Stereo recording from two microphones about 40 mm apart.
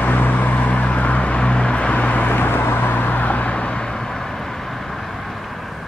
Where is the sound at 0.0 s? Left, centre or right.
Left.